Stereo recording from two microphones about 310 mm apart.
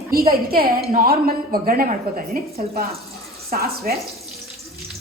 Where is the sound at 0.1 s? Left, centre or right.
Right.